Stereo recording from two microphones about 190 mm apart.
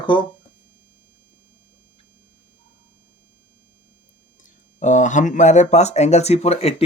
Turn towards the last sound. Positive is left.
turn(degrees=35)  # may be behind; listen again after turning